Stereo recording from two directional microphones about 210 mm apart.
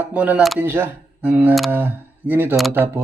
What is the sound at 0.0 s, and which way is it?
Speech, 5° right (ahead or behind).